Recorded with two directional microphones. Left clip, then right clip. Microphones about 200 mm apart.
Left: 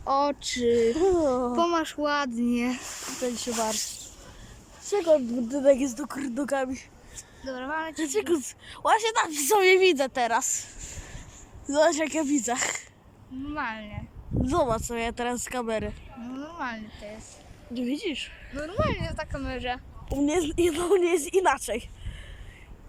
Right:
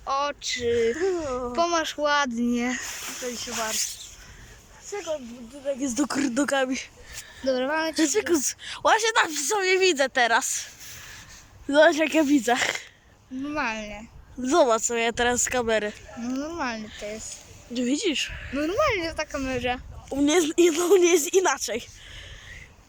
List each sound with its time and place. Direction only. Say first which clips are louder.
0.0 s speech: left 2 dB; 25° left (ahead or behind)
1.7 s a woman's voice: right 3 dB; centre (ahead or behind)
4.9 s speech: left 9 dB; 20° left (ahead or behind)
5.8 s a woman's voice: right 5 dB; 5° right (ahead or behind)
6.3 s a woman's voice: right 1 dB; 5° left (ahead or behind)
7.4 s speech: right 7 dB; 10° right (ahead or behind)
8.0 s a woman's voice: right 1 dB; 5° left (ahead or behind)
11.7 s a woman's voice: right 5 dB; centre (ahead or behind)
13.5 s speech: right 4 dB; 10° right (ahead or behind)
14.4 s a woman's voice: right 6 dB; 5° left (ahead or behind)
16.2 s speech: right 5 dB; 15° right (ahead or behind)
17.7 s a woman's voice: right 5 dB; 5° left (ahead or behind)
20.2 s a woman's voice: right 5 dB; 5° left (ahead or behind)